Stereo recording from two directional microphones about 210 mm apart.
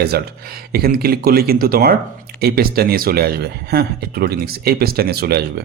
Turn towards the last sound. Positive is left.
turn(degrees=-50)  # may be behind; listen again after turning